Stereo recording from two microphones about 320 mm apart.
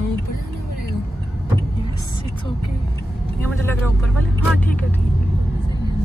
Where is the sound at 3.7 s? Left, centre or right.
Centre.